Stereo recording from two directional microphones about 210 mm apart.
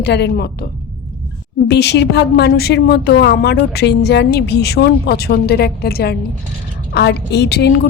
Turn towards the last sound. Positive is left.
turn(degrees=50)  # may be behind; listen again after turning